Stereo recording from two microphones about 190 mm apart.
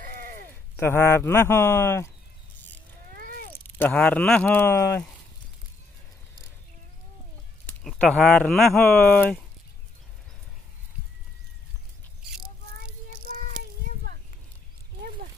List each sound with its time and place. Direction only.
0.0 s a sound: 50° right (ahead or behind)
0.7 s speech: 10° left (ahead or behind)
3.2 s a sound: 50° right (ahead or behind)
3.5 s speech: 10° left (ahead or behind)
7.6 s speech: 5° left (ahead or behind)
12.8 s music: 50° right (ahead or behind)
13.6 s children playing: 50° right (ahead or behind)